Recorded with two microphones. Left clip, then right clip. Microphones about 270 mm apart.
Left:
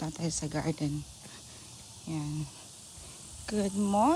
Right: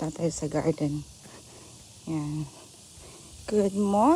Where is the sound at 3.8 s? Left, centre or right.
Right.